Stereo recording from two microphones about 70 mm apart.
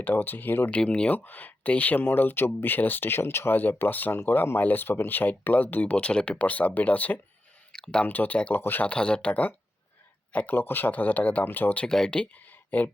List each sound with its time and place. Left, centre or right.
0.0 s speech: left
0.7 s speech: centre
7.7 s a sound: centre
8.0 s speech: left
8.9 s speech: centre
11.9 s speech: centre